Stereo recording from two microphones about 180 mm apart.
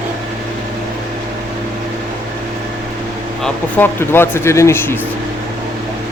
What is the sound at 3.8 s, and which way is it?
Speech, 10° left (ahead or behind).